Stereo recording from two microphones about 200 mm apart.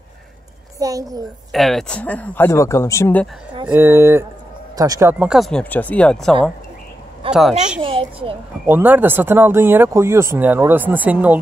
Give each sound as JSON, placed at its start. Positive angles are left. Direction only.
{"t": 0.7, "sound": "a child's voice", "side_deg": -15}
{"t": 1.5, "sound": "speech", "side_deg": 0}
{"t": 3.6, "sound": "speech", "side_deg": -10}
{"t": 5.2, "sound": "speech", "side_deg": 0}
{"t": 7.8, "sound": "a woman's voice", "side_deg": -25}
{"t": 8.6, "sound": "speech", "side_deg": -10}